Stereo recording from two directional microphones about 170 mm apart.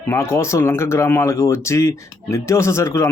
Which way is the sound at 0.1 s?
15° left (ahead or behind).